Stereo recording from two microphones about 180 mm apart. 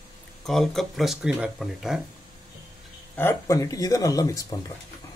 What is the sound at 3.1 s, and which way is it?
Speech, 10° left (ahead or behind).